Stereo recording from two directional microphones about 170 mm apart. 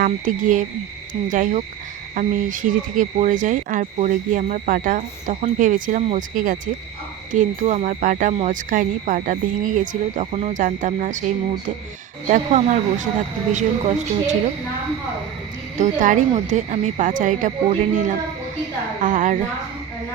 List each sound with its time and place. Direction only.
0.0 s speech: 50° right (ahead or behind)
12.3 s speech: 50° right (ahead or behind)
15.8 s speech: 50° right (ahead or behind)